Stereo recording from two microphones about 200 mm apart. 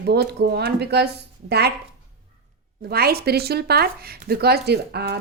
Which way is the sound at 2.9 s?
50° right (ahead or behind).